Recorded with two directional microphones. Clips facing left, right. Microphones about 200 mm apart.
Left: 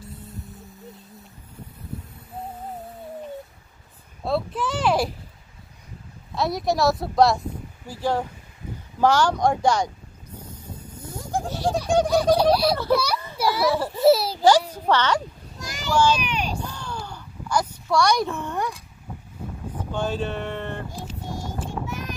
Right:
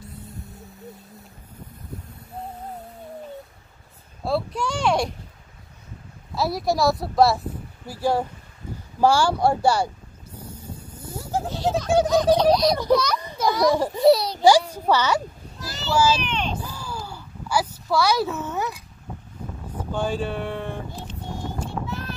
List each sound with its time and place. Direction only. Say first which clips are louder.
0.4 s vehicle: even; centre (ahead or behind)
4.2 s a woman's voice: even; centre (ahead or behind)
6.3 s a woman's voice: even; centre (ahead or behind)
10.6 s a sound: right 1 dB; 10° right (ahead or behind)
11.4 s a child's voice: right 1 dB; 10° left (ahead or behind)
13.7 s speech: right 3 dB; 15° right (ahead or behind)
14.0 s a woman's voice: even; 5° left (ahead or behind)
14.7 s speech: even; 10° right (ahead or behind)
16.2 s speech: even; 10° left (ahead or behind)
16.6 s a sound: even; 5° right (ahead or behind)
19.9 s speech: right 1 dB; 10° right (ahead or behind)
21.8 s a sound: even; 15° left (ahead or behind)